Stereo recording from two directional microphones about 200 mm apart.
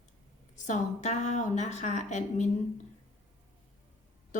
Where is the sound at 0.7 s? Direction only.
35° left (ahead or behind).